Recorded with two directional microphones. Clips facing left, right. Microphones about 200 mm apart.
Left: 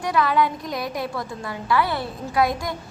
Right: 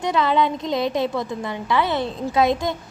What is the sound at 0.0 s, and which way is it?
A woman's voice, 25° right (ahead or behind).